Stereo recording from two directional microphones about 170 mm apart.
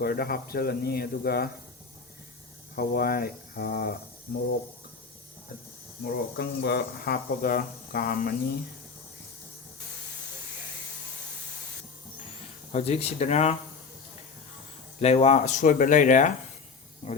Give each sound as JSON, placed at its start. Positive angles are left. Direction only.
{"t": 0.0, "sound": "speech", "side_deg": 60}
{"t": 2.7, "sound": "speech", "side_deg": 60}
{"t": 6.3, "sound": "speech", "side_deg": 75}
{"t": 12.7, "sound": "speech", "side_deg": 40}
{"t": 15.0, "sound": "speech", "side_deg": 40}